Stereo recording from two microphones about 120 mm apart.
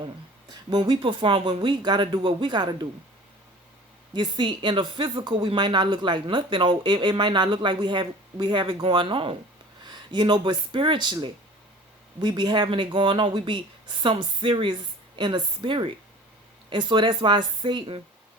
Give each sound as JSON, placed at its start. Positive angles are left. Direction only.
{"t": 0.7, "sound": "a woman's voice", "side_deg": -40}
{"t": 4.1, "sound": "a woman's voice", "side_deg": -40}